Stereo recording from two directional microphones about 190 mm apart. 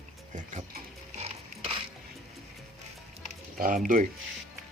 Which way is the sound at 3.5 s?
45° right (ahead or behind).